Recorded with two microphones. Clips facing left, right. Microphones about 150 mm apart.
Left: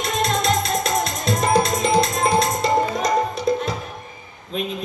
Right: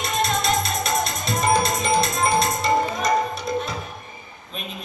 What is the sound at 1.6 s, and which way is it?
Tabla, 90° left.